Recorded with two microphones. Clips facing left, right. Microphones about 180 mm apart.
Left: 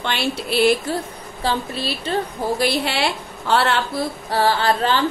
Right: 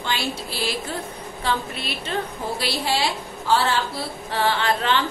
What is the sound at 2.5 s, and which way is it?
A woman's voice, 55° left (ahead or behind).